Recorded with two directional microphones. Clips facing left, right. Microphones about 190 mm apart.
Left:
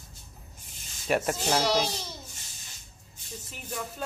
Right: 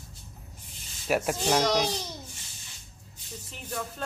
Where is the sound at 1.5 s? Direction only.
5° left (ahead or behind).